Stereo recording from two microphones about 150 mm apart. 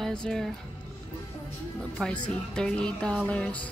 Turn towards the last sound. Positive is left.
turn(degrees=10)  # may be behind; listen again after turning